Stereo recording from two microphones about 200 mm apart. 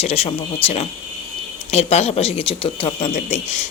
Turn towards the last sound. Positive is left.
turn(degrees=30)  # may be behind; listen again after turning